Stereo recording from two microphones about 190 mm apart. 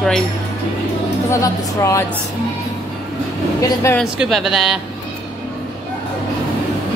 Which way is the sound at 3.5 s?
15° left (ahead or behind).